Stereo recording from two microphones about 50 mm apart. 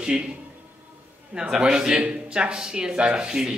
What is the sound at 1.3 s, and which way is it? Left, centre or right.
Speech, centre.